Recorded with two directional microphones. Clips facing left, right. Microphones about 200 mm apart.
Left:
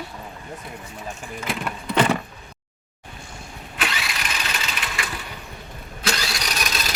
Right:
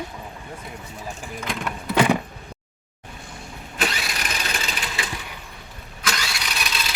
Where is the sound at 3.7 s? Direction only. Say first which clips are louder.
Right 2 dB; 40° right (ahead or behind).